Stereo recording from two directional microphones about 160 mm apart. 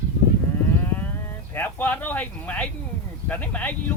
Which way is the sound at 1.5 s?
10° left (ahead or behind).